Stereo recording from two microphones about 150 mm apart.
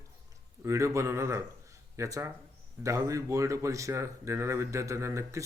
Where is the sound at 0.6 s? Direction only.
20° right (ahead or behind).